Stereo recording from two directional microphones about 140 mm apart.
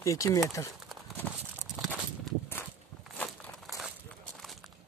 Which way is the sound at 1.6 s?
5° right (ahead or behind).